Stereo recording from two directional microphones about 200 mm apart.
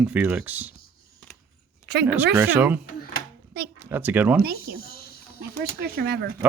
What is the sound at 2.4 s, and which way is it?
Speech, 10° right (ahead or behind).